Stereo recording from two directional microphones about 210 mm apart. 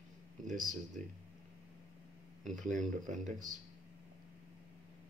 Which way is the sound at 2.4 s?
35° right (ahead or behind).